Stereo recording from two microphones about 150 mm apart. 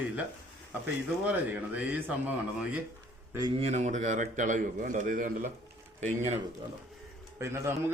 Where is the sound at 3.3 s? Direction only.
25° right (ahead or behind).